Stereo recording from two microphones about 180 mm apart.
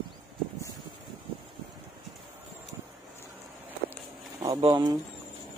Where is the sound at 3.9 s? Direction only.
20° right (ahead or behind).